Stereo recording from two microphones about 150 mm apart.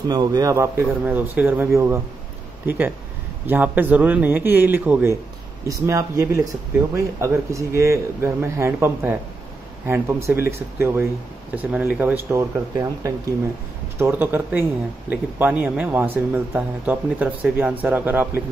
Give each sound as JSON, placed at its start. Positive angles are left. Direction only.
{"t": 0.1, "sound": "speech", "side_deg": -25}